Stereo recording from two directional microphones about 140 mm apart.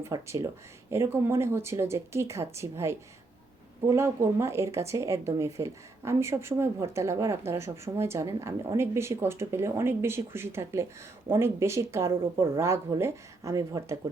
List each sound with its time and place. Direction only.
0.0 s speech: 20° right (ahead or behind)